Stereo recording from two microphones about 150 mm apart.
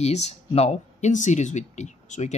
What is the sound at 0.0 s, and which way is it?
Speech, 45° left (ahead or behind).